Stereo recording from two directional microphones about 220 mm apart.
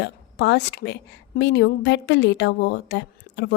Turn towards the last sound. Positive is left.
turn(degrees=50)  # may be behind; listen again after turning